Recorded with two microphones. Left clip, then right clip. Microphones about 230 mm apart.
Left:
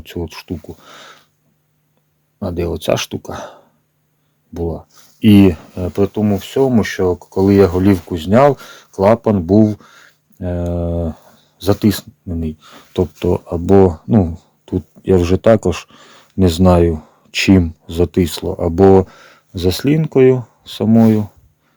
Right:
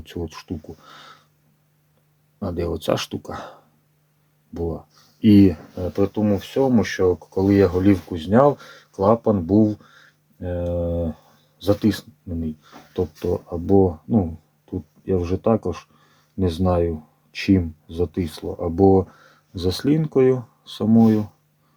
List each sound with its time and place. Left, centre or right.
0.0 s speech: left
2.4 s speech: left
5.7 s speech: left